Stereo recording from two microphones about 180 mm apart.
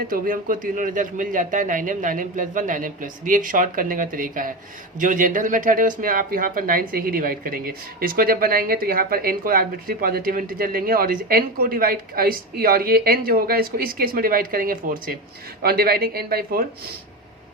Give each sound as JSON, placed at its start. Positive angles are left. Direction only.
{"t": 0.1, "sound": "speech", "side_deg": -50}